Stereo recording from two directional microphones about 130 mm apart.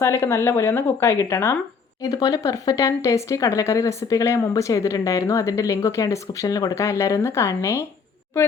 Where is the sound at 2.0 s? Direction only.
30° left (ahead or behind).